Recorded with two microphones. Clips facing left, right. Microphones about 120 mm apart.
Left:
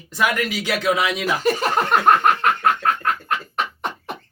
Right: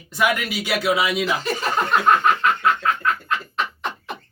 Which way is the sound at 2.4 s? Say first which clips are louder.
Left 1 dB; 55° left (ahead or behind).